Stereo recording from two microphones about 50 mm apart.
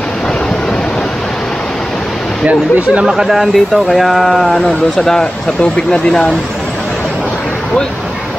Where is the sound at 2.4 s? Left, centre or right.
Right.